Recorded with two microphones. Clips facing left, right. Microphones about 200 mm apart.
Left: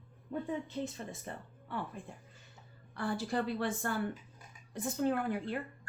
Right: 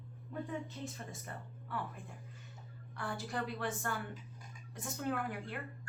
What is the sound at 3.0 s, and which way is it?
A woman's voice, 30° left (ahead or behind).